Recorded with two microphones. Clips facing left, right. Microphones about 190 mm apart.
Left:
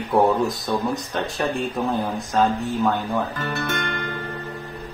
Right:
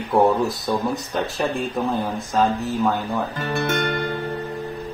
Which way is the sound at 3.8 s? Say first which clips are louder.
Right 5 dB; 45° right (ahead or behind).